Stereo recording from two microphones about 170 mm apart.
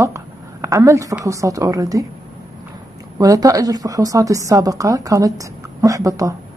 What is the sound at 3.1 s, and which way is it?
A woman's voice, 20° right (ahead or behind).